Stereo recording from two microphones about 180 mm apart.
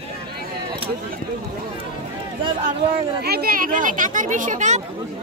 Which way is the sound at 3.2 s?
60° right (ahead or behind).